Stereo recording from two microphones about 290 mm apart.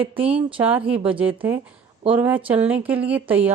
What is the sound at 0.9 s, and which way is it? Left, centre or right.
Speech, centre.